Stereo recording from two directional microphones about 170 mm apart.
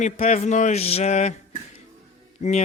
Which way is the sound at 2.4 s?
40° left (ahead or behind).